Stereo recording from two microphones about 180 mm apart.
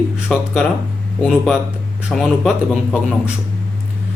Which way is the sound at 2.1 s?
Centre (ahead or behind).